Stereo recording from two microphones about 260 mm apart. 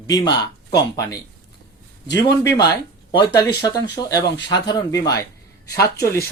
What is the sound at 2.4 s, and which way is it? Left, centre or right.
Speech, centre.